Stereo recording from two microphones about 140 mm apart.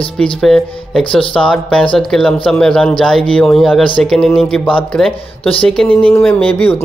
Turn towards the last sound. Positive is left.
turn(degrees=10)  # may be behind; listen again after turning